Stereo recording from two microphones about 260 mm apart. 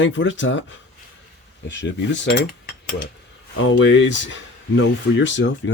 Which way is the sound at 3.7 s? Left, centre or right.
Left.